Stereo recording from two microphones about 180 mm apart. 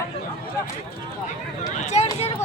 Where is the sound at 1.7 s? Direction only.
40° left (ahead or behind).